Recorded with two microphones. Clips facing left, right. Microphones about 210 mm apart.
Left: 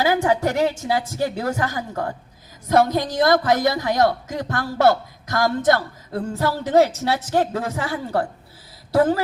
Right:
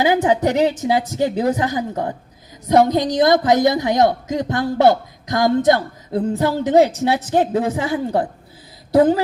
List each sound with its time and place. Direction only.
0.0 s a woman's voice: 20° right (ahead or behind)